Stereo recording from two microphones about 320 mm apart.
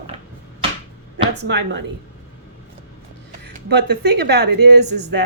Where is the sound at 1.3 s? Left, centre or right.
Right.